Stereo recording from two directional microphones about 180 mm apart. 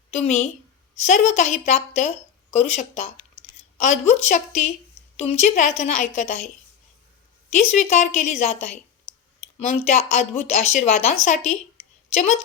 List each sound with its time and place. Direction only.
0.2 s a woman's voice: 35° left (ahead or behind)
7.5 s a woman's voice: 40° left (ahead or behind)
9.6 s a woman's voice: 35° left (ahead or behind)